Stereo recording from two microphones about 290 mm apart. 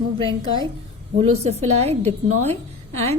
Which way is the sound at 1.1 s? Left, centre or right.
Right.